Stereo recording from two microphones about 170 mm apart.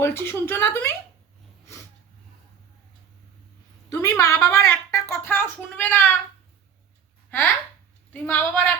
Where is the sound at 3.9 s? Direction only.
15° left (ahead or behind).